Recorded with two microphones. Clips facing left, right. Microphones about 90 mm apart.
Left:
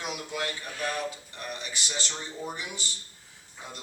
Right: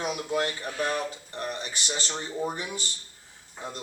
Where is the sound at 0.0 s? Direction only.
35° right (ahead or behind).